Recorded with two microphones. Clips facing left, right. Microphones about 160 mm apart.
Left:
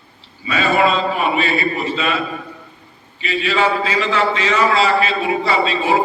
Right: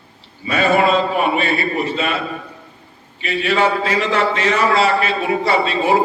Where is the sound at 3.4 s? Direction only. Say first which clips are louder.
Right 1 dB; 55° right (ahead or behind).